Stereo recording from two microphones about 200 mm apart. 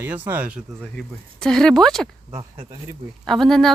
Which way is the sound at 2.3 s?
15° right (ahead or behind).